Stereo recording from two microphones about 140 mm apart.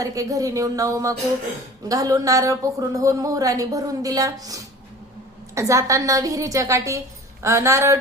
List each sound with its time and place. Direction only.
0.0 s speech: 25° right (ahead or behind)